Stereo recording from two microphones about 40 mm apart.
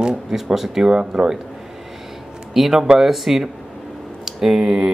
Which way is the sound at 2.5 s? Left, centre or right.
Centre.